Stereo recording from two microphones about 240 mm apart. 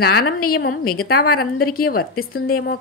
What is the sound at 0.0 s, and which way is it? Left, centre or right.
A woman's voice, left.